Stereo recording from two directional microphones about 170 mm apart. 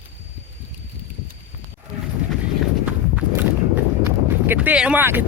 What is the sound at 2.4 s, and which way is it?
Horse, 10° right (ahead or behind).